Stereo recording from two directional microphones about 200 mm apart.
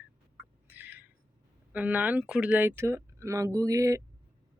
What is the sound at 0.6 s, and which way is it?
Bird, 10° right (ahead or behind).